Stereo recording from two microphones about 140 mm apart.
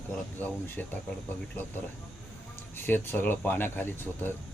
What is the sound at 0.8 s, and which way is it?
Speech, 10° left (ahead or behind).